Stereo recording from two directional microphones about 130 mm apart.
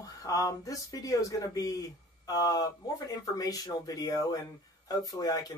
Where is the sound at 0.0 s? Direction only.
25° left (ahead or behind).